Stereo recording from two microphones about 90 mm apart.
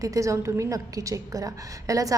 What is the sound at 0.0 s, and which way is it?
A woman's voice, 40° right (ahead or behind).